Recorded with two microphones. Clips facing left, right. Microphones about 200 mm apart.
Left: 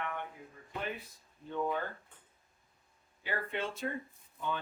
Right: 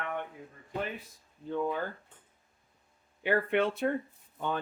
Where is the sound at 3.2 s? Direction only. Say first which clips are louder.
Right 10 dB; 65° right (ahead or behind).